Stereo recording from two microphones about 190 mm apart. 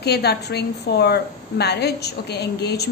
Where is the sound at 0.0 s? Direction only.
60° left (ahead or behind).